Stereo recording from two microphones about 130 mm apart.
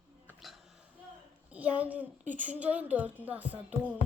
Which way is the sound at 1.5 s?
10° right (ahead or behind).